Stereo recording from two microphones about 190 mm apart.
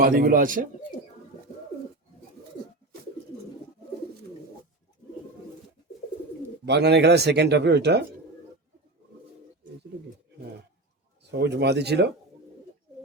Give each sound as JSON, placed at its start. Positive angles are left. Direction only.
{"t": 0.0, "sound": "speech", "side_deg": -50}
{"t": 6.7, "sound": "speech", "side_deg": -60}
{"t": 11.2, "sound": "speech", "side_deg": -65}